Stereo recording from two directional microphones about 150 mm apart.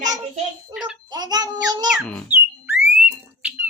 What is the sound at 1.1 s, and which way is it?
Child singing, 25° right (ahead or behind).